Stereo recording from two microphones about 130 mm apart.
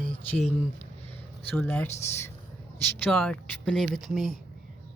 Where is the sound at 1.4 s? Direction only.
15° left (ahead or behind).